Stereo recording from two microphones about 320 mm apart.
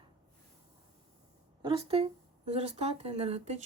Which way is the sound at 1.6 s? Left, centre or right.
Centre.